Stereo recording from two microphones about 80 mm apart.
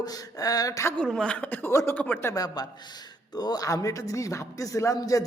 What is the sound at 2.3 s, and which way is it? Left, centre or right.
A man's voice, left.